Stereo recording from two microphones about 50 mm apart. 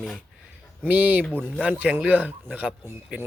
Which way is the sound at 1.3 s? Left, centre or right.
Right.